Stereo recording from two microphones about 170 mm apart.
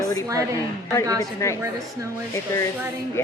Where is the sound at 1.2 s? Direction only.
15° left (ahead or behind).